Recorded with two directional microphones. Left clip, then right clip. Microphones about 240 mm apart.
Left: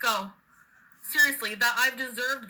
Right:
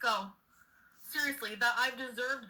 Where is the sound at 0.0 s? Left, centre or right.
Left.